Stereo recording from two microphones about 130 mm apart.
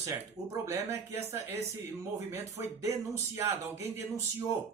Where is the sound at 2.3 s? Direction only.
20° right (ahead or behind).